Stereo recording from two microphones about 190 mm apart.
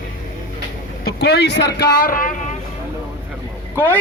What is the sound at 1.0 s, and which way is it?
Speech, 60° left (ahead or behind).